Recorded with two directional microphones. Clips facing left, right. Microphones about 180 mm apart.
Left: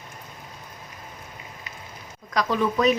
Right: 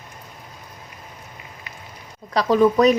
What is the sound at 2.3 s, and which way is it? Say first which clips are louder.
Speech: right 7 dB; 35° right (ahead or behind).